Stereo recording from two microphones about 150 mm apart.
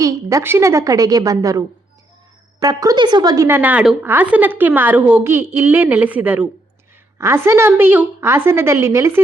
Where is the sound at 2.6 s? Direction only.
25° right (ahead or behind).